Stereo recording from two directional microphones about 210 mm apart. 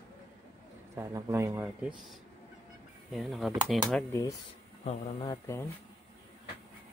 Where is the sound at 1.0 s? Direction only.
15° right (ahead or behind).